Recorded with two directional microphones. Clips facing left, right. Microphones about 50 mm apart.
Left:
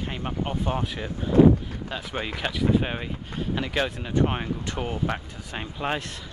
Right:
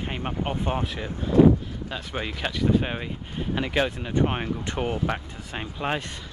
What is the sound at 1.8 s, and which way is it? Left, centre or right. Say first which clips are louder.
Speech: even; centre.